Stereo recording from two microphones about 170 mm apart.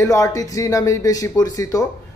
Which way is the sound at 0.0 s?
20° left (ahead or behind).